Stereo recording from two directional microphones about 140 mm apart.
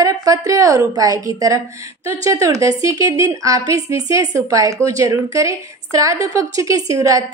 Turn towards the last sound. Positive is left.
turn(degrees=-25)  # may be behind; listen again after turning